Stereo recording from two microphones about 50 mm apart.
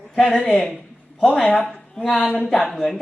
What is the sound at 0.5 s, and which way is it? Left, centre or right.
Speech, centre.